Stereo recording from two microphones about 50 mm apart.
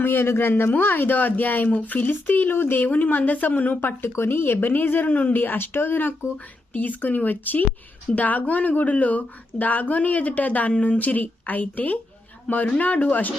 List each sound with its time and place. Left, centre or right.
0.0 s a man's voice: left
6.7 s speech: left